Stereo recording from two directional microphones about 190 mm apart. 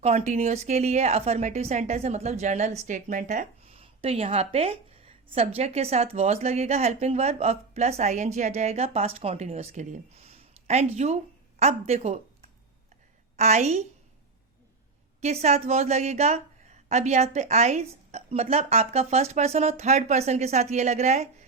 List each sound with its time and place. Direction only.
0.0 s a woman's voice: 35° right (ahead or behind)
3.8 s a woman's voice: 30° right (ahead or behind)
13.3 s a woman's voice: 35° right (ahead or behind)
15.2 s a woman's voice: 35° right (ahead or behind)